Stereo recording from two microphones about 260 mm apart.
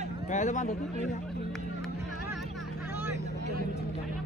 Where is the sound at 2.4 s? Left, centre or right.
Centre.